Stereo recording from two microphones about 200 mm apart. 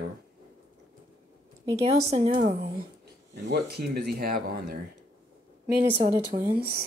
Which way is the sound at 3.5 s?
55° right (ahead or behind).